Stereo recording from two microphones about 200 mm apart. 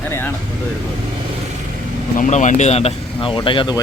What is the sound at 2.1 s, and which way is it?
Speech, 40° left (ahead or behind).